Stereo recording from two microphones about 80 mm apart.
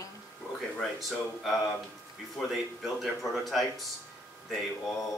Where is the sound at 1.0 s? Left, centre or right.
Centre.